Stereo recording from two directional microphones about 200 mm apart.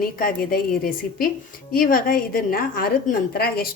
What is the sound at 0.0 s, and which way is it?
A woman's voice, 45° left (ahead or behind).